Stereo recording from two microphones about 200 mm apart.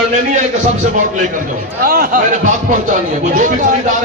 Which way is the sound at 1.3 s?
45° right (ahead or behind).